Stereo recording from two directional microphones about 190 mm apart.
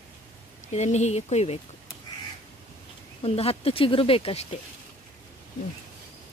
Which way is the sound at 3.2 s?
30° left (ahead or behind).